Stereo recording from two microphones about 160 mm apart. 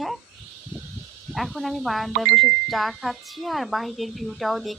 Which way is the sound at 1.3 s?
Centre (ahead or behind).